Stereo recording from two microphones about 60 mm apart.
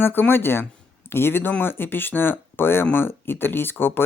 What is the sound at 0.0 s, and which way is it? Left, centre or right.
Speech, left.